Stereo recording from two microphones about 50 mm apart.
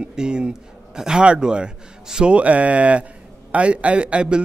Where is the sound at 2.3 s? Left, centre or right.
Right.